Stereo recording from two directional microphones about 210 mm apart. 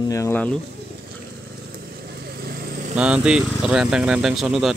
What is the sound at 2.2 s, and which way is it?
Vehicle, 45° right (ahead or behind).